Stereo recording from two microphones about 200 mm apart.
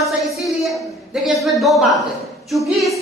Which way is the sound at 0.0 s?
Centre (ahead or behind).